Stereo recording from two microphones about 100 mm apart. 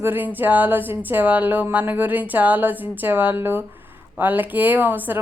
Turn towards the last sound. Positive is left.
turn(degrees=-20)  # may be behind; listen again after turning